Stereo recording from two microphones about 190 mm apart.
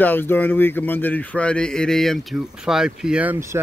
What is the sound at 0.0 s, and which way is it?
Speech, 10° left (ahead or behind).